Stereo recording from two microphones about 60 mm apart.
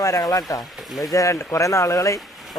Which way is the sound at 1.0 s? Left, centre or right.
Left.